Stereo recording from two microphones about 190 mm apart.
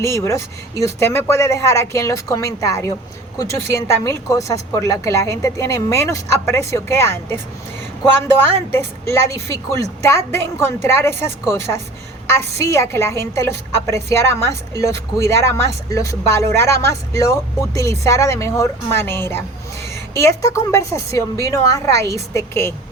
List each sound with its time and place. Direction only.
0.0 s a woman's voice: 15° left (ahead or behind)
8.7 s a woman's voice: 15° left (ahead or behind)